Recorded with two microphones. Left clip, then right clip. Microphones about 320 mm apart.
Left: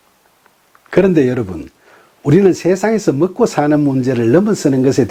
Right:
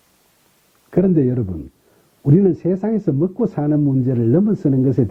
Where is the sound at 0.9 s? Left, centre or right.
Centre.